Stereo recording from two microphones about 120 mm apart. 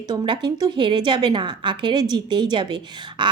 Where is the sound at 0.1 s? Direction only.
40° right (ahead or behind).